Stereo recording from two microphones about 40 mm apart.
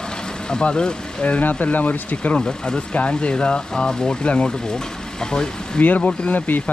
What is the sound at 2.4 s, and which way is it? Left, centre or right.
Speech, centre.